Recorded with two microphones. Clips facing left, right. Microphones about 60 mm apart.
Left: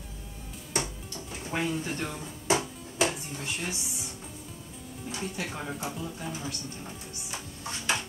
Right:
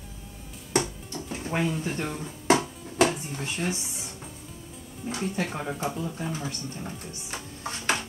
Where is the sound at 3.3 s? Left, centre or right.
Right.